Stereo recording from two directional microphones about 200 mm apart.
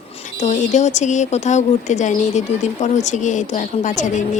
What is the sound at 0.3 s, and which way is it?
A woman's voice, 35° left (ahead or behind).